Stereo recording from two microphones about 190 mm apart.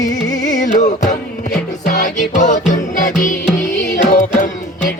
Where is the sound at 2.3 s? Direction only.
40° left (ahead or behind).